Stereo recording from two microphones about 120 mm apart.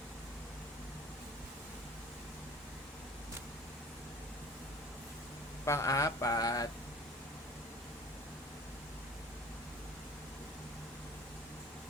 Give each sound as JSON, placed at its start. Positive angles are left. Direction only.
{"t": 5.6, "sound": "speech", "side_deg": 25}